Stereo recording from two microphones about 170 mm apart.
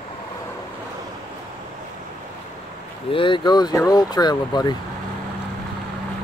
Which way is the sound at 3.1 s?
30° left (ahead or behind).